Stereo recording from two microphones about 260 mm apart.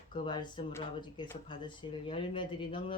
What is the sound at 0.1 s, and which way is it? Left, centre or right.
Speech, centre.